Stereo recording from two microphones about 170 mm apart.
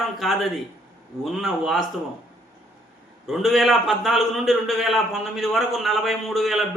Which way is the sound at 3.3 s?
Centre (ahead or behind).